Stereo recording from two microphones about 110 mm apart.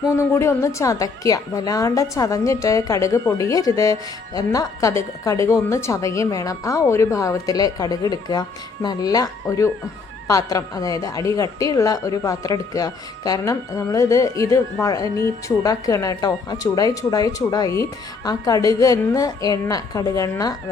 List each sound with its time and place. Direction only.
0.2 s a woman's voice: 25° left (ahead or behind)